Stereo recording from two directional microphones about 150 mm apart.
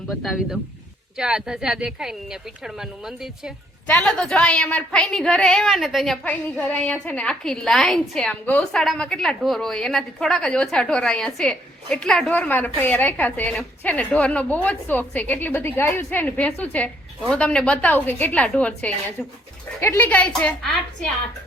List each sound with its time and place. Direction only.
0.1 s a woman's voice: centre (ahead or behind)